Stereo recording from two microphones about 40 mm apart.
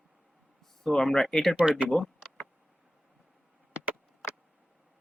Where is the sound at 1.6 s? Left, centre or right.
Right.